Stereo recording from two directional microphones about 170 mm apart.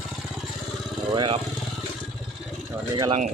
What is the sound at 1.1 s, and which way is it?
Speech, 25° right (ahead or behind).